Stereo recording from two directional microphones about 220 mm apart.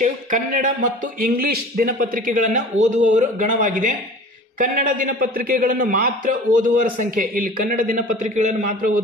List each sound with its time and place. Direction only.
0.0 s a man's voice: 35° right (ahead or behind)